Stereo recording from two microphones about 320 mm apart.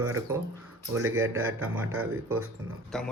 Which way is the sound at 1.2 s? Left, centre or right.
Centre.